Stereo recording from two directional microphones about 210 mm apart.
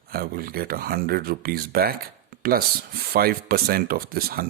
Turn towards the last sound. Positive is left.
turn(degrees=-45)  # may be behind; listen again after turning